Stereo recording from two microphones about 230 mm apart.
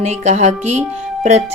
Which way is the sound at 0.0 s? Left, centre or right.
Right.